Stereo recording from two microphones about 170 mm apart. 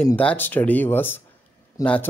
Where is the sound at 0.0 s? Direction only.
5° left (ahead or behind).